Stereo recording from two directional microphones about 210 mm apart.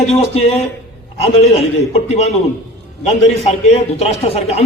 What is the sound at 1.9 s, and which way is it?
A man's voice, 30° left (ahead or behind).